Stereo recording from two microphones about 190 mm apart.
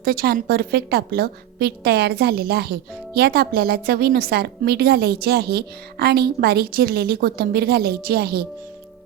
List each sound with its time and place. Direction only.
0.0 s a woman's voice: 50° right (ahead or behind)